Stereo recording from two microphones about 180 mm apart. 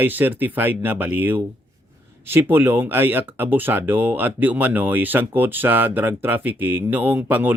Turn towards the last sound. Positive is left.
turn(degrees=-10)  # may be behind; listen again after turning